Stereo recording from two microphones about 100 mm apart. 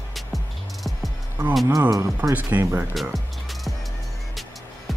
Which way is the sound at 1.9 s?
30° right (ahead or behind).